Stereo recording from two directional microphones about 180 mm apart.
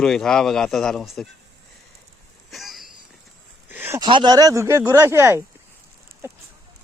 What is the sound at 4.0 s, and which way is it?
Speech, 25° right (ahead or behind).